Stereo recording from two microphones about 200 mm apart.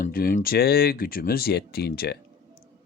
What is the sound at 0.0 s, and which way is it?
A man's voice, 45° left (ahead or behind).